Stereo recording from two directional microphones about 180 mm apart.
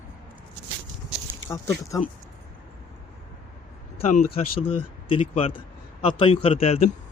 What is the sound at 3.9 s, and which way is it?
Speech, 40° left (ahead or behind).